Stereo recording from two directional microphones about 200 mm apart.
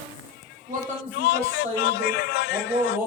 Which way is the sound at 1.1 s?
55° left (ahead or behind).